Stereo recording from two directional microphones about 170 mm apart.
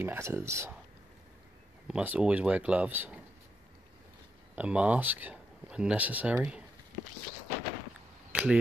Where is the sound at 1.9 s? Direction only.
5° right (ahead or behind).